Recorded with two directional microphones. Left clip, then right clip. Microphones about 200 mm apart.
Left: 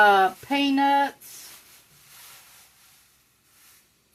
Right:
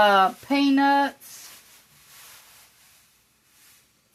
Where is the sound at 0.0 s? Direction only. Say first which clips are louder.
Even; 35° right (ahead or behind).